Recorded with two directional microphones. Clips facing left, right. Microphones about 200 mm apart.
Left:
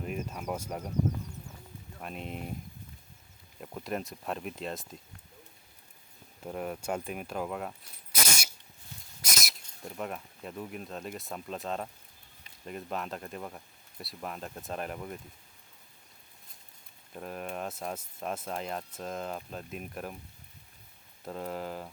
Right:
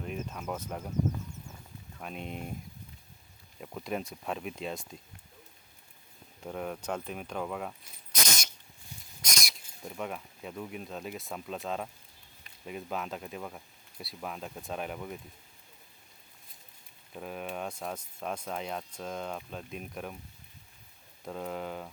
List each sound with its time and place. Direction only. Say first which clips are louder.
0.0 s a sound: left 1 dB; 5° left (ahead or behind)
2.0 s speech: even; centre (ahead or behind)
3.6 s speech: even; 5° left (ahead or behind)
6.4 s speech: left 1 dB; 5° left (ahead or behind)
7.7 s a sound: left 1 dB; 10° left (ahead or behind)
9.2 s speech: left 1 dB; 5° left (ahead or behind)
17.2 s speech: even; centre (ahead or behind)
21.2 s speech: even; centre (ahead or behind)